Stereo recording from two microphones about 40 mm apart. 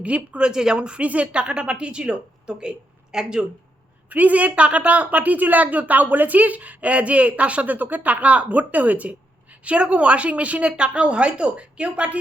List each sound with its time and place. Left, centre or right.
0.0 s a woman's voice: right
0.5 s a woman's voice: centre
4.1 s a woman's voice: right